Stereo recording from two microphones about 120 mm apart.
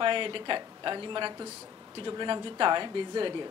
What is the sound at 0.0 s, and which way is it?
A woman's voice, 45° right (ahead or behind).